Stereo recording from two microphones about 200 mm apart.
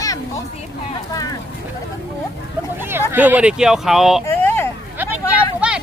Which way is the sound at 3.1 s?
10° right (ahead or behind).